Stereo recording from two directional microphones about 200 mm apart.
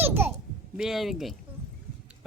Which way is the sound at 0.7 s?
Centre (ahead or behind).